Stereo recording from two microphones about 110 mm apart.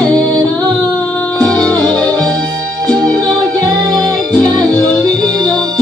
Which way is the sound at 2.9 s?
35° right (ahead or behind).